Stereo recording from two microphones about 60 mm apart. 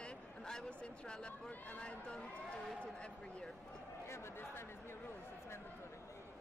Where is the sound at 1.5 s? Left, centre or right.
Left.